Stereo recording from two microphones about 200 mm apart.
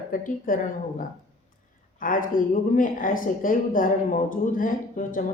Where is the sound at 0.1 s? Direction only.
45° left (ahead or behind).